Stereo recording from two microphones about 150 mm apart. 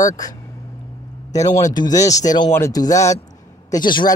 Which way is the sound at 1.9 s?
25° left (ahead or behind).